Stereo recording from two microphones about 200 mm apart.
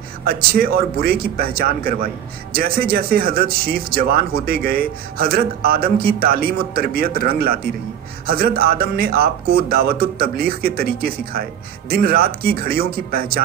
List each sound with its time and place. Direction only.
0.3 s speech: 50° right (ahead or behind)